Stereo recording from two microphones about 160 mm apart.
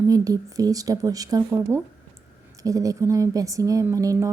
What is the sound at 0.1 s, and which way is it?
A woman's voice, 20° right (ahead or behind).